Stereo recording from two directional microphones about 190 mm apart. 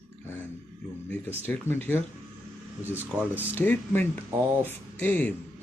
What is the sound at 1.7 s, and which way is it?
Speech, 10° left (ahead or behind).